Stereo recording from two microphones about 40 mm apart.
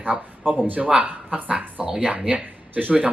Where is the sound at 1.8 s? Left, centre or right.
Centre.